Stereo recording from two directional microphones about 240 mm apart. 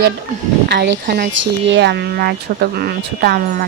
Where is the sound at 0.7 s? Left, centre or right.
Right.